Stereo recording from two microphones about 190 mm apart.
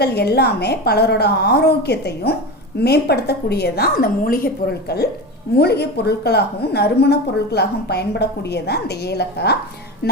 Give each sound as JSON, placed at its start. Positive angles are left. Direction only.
{"t": 0.0, "sound": "a woman's voice", "side_deg": 60}